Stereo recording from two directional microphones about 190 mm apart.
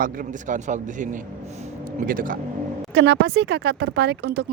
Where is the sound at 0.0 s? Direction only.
45° right (ahead or behind).